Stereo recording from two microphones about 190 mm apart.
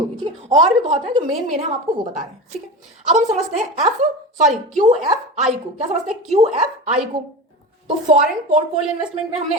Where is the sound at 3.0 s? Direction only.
35° right (ahead or behind).